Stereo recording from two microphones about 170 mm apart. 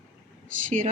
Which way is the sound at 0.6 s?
50° right (ahead or behind).